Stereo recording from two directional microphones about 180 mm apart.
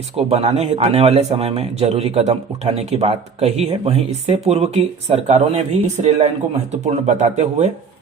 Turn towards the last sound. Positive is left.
turn(degrees=-40)  # may be behind; listen again after turning